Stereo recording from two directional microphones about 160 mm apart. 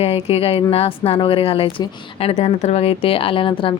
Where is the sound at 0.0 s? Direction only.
40° left (ahead or behind).